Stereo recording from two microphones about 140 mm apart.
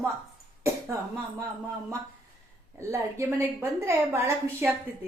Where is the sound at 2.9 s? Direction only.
20° right (ahead or behind).